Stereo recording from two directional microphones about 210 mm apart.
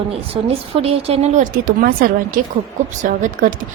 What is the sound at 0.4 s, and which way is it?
Speech, 30° right (ahead or behind).